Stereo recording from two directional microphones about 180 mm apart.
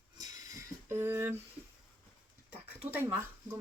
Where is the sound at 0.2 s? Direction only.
20° right (ahead or behind).